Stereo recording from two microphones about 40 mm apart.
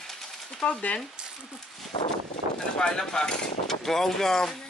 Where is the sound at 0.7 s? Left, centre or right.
Left.